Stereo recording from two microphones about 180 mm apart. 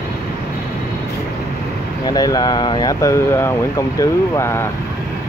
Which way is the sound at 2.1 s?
20° left (ahead or behind).